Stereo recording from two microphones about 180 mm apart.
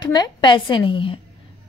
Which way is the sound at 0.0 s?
25° left (ahead or behind).